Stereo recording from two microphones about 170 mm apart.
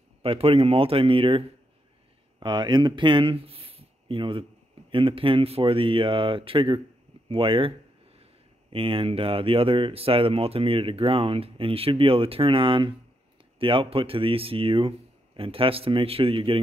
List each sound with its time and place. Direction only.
0.2 s speech: 35° right (ahead or behind)
2.4 s speech: 25° right (ahead or behind)